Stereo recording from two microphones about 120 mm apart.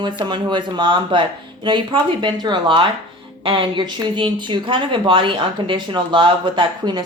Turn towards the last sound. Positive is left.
turn(degrees=-40)  # may be behind; listen again after turning